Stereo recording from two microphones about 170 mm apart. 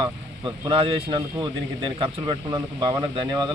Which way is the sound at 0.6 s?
30° right (ahead or behind).